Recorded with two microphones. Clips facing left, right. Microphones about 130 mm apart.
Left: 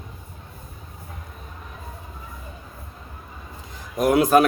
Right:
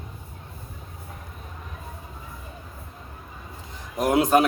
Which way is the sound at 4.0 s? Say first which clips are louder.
Left 3 dB; 25° right (ahead or behind).